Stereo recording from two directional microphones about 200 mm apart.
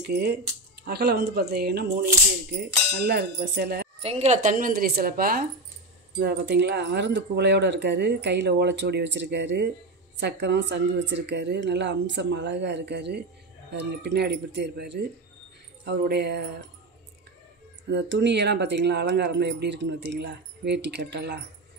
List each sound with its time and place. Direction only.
0.1 s a woman's voice: 50° right (ahead or behind)
4.0 s a woman's voice: 30° right (ahead or behind); by 16.4 s 55° right (ahead or behind)
17.9 s speech: 60° right (ahead or behind)